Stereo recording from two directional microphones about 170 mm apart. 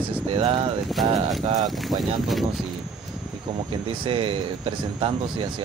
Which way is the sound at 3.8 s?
30° right (ahead or behind).